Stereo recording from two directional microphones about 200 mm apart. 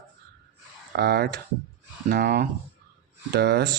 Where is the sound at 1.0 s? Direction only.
55° right (ahead or behind).